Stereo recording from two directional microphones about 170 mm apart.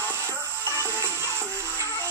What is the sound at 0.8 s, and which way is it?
Music, 15° right (ahead or behind).